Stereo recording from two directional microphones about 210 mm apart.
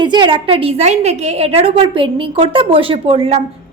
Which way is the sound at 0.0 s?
20° right (ahead or behind).